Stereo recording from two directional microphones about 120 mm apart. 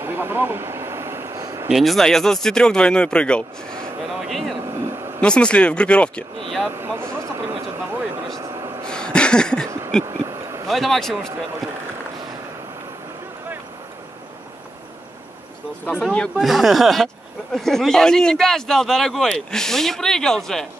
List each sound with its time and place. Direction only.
0.0 s vehicle: 20° right (ahead or behind)
1.7 s speech: centre (ahead or behind)
4.6 s vehicle: 30° right (ahead or behind)
5.2 s speech: 10° left (ahead or behind)
6.7 s a sound: 20° right (ahead or behind)
8.2 s vehicle: 30° right (ahead or behind)
8.8 s a sound: 5° left (ahead or behind)
10.0 s owl: 30° right (ahead or behind)
10.7 s speech: centre (ahead or behind)
16.0 s speech: 5° left (ahead or behind)